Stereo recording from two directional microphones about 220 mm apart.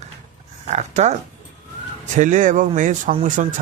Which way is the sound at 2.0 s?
35° right (ahead or behind).